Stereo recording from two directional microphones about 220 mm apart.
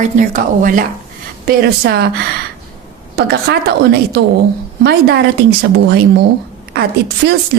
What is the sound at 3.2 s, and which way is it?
A woman's voice, 45° right (ahead or behind).